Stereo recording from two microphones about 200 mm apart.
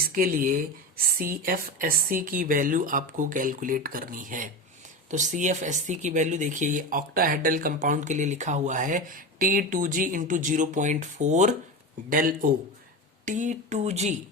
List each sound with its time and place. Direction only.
0.0 s speech: 45° right (ahead or behind)